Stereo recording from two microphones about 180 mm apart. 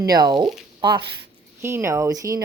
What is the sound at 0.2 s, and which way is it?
Speech, 20° right (ahead or behind).